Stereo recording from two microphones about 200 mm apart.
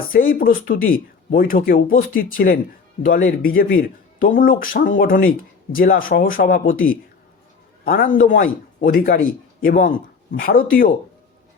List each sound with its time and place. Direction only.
0.1 s speech: 45° left (ahead or behind)